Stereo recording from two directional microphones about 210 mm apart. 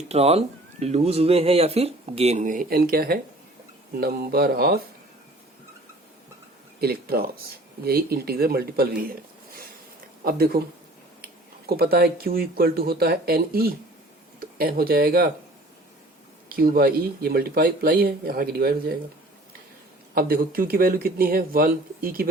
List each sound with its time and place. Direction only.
0.1 s speech: 30° right (ahead or behind); by 4.8 s 45° right (ahead or behind)
6.7 s speech: 45° right (ahead or behind)
10.2 s speech: 45° right (ahead or behind)
11.6 s speech: 45° right (ahead or behind)
16.6 s speech: 45° right (ahead or behind)
20.1 s speech: 45° right (ahead or behind)